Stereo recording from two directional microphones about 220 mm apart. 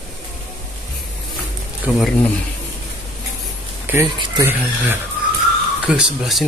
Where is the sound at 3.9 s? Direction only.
10° right (ahead or behind).